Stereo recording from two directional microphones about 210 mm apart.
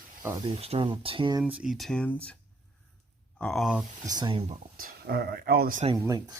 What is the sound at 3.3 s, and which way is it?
Speech, 5° left (ahead or behind).